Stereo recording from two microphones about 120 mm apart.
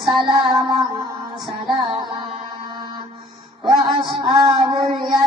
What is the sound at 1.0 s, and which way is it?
Music, 40° right (ahead or behind).